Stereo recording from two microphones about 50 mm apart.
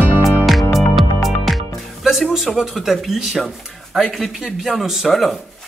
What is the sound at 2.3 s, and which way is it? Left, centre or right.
Speech, centre.